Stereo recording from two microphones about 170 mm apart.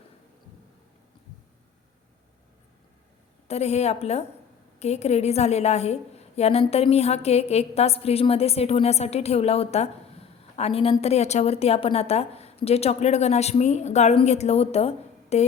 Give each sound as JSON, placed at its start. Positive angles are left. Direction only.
{"t": 3.4, "sound": "a woman's voice", "side_deg": 40}